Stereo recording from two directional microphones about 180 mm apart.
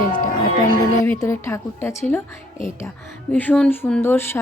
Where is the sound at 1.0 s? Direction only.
15° left (ahead or behind).